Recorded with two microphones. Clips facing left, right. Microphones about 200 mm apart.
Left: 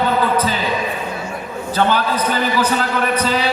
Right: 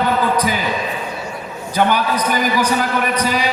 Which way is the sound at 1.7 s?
15° right (ahead or behind).